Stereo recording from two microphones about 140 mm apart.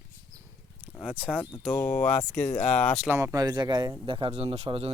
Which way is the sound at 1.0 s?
10° right (ahead or behind).